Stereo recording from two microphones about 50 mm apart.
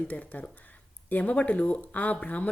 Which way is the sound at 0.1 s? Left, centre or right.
Left.